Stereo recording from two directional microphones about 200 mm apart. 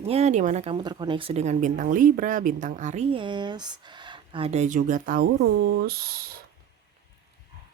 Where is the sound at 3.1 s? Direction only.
25° right (ahead or behind); by 6.3 s 50° right (ahead or behind).